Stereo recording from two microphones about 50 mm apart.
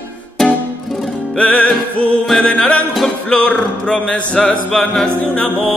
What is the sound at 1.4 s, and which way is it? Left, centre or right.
Music, left.